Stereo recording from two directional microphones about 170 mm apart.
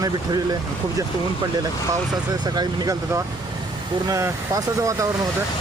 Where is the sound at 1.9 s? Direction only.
25° right (ahead or behind).